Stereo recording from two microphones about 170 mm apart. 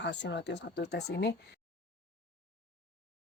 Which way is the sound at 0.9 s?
80° left.